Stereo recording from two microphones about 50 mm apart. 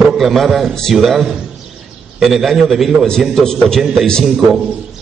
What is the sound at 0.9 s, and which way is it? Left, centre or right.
A man's voice, centre.